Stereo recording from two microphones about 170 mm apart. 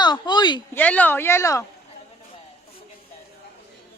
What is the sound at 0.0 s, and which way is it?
Speech, 25° left (ahead or behind).